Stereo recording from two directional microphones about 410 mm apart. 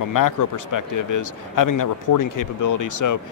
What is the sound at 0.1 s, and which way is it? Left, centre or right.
Speech, left.